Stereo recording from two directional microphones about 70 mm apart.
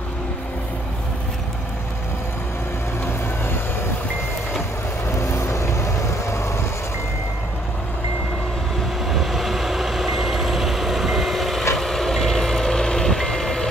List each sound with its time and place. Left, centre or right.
5.1 s vehicle: left
9.0 s vehicle: centre